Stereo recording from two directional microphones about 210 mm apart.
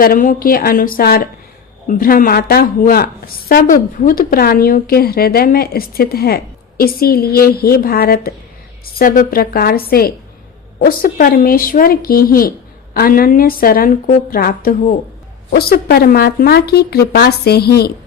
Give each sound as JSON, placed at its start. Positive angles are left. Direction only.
{"t": 0.0, "sound": "a woman's voice", "side_deg": 40}